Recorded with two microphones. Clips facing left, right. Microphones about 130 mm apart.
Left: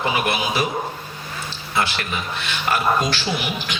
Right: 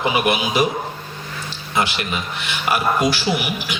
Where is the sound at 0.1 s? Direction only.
15° right (ahead or behind).